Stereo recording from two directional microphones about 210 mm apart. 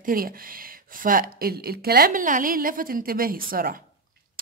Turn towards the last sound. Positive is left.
turn(degrees=-45)  # may be behind; listen again after turning